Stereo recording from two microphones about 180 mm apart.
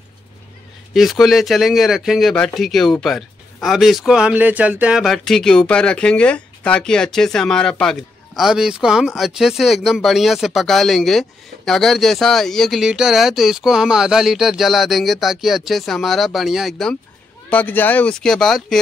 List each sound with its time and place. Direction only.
0.9 s speech: centre (ahead or behind)